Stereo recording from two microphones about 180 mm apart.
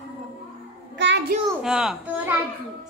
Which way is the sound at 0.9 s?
75° right (ahead or behind).